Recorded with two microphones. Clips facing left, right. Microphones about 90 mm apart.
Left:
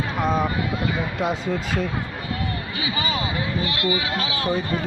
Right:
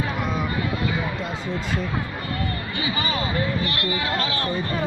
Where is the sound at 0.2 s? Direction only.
40° left (ahead or behind).